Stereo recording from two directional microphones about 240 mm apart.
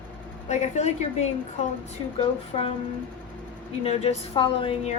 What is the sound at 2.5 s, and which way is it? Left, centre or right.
Speech, left.